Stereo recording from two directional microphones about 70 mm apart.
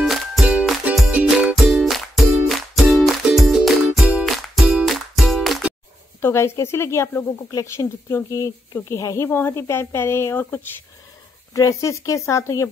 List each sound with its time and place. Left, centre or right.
0.0 s music: centre
0.9 s music: centre
1.2 s music: centre
6.2 s a woman's voice: left
11.5 s speech: left